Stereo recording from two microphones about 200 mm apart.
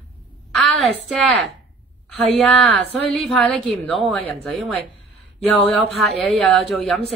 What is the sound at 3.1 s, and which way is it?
Speech, 5° left (ahead or behind).